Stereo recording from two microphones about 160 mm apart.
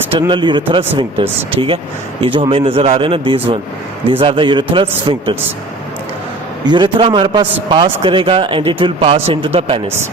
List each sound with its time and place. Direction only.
0.1 s a man's voice: 30° right (ahead or behind)
6.7 s a man's voice: 30° right (ahead or behind)